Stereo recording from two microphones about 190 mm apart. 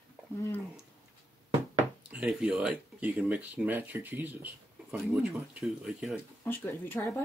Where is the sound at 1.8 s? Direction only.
5° right (ahead or behind).